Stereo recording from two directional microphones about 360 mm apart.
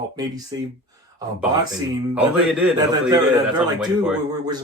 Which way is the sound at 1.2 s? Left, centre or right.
Centre.